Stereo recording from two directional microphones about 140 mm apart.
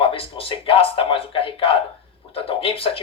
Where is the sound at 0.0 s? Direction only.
40° left (ahead or behind).